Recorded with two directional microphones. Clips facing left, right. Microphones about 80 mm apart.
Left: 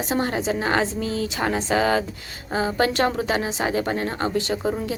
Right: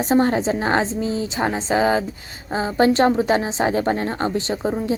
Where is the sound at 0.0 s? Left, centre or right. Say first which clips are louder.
Right 6 dB; right.